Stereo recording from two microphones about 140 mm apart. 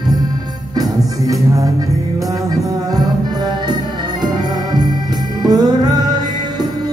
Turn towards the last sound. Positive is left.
turn(degrees=-30)  # may be behind; listen again after turning